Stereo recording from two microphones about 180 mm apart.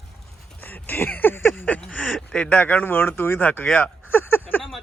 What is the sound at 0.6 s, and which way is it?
Speech, 10° left (ahead or behind).